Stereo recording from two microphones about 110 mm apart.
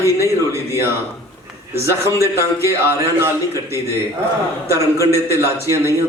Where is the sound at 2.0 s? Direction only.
25° right (ahead or behind).